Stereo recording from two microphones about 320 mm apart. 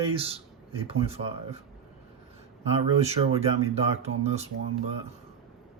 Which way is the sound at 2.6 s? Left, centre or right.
Centre.